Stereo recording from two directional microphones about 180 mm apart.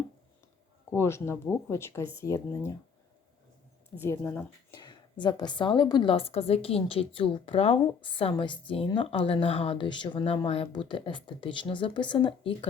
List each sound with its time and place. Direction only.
0.9 s speech: 15° left (ahead or behind)
3.9 s speech: 10° left (ahead or behind)
4.7 s speech: 25° left (ahead or behind)